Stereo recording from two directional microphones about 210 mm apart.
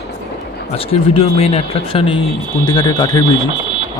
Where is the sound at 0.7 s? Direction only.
25° left (ahead or behind).